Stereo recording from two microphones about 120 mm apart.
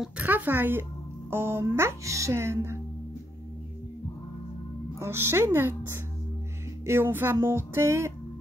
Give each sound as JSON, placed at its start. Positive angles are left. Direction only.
{"t": 0.2, "sound": "a woman's voice", "side_deg": -15}
{"t": 4.9, "sound": "a woman's voice", "side_deg": -20}